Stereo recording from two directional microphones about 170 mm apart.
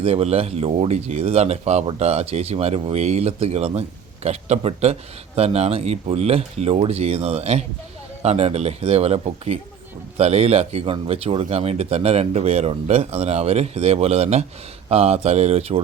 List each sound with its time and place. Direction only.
0.0 s speech: 35° right (ahead or behind)